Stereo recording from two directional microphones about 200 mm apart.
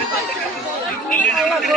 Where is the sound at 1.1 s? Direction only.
5° left (ahead or behind).